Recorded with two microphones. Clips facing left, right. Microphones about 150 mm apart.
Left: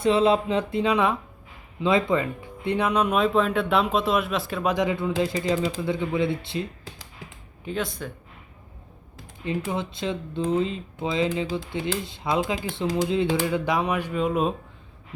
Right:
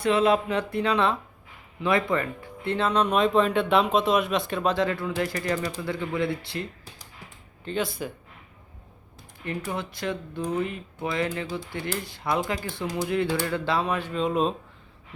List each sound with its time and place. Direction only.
0.0 s speech: 30° left (ahead or behind); by 4.7 s 5° left (ahead or behind)
4.7 s speech: 15° left (ahead or behind)
7.8 s speech: 5° right (ahead or behind)
9.4 s speech: 20° left (ahead or behind)